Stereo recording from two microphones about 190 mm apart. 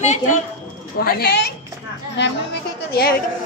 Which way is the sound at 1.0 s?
55° left (ahead or behind).